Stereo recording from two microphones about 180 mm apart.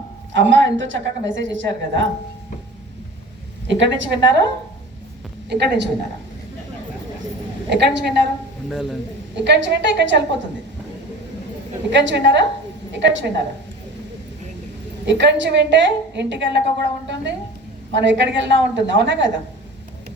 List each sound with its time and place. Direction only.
0.3 s a woman's voice: 90° right
3.7 s a woman's voice: 90° right
5.5 s a woman's voice: 70° right (ahead or behind)
7.7 s a woman's voice: 75° right (ahead or behind)
8.7 s speech: centre (ahead or behind)
9.3 s a woman's voice: 75° right (ahead or behind)
11.9 s a woman's voice: 85° right
15.0 s a woman's voice: 80° right
17.9 s a woman's voice: 80° right